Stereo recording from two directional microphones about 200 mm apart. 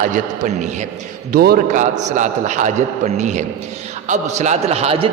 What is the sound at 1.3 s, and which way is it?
Speech, 50° right (ahead or behind).